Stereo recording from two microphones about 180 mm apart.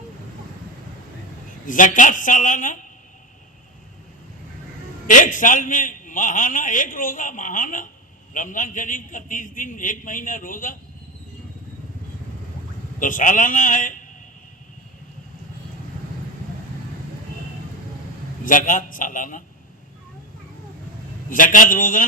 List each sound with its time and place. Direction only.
1.6 s a man's voice: 45° left (ahead or behind)
5.0 s a man's voice: 45° left (ahead or behind)
13.0 s a man's voice: 45° left (ahead or behind)
18.4 s a man's voice: 50° left (ahead or behind)
21.2 s a man's voice: 45° left (ahead or behind)